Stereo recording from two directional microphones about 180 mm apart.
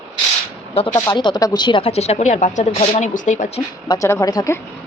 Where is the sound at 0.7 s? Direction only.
30° left (ahead or behind).